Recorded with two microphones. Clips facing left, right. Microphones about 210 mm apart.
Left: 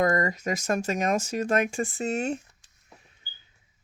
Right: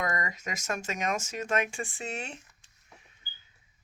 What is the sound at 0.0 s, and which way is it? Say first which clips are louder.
Speech: left 9 dB; 35° left (ahead or behind).